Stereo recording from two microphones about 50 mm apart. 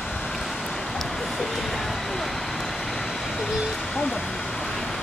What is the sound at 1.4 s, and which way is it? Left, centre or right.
Vehicle, centre.